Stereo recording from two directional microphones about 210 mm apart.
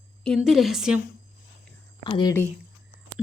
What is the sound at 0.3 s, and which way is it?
Speech, centre (ahead or behind).